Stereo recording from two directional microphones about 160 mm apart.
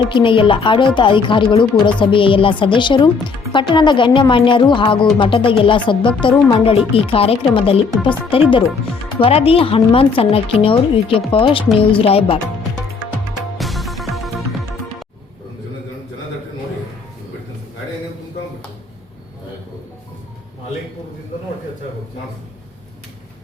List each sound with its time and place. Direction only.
0.1 s speech: 30° left (ahead or behind)
13.6 s music: centre (ahead or behind)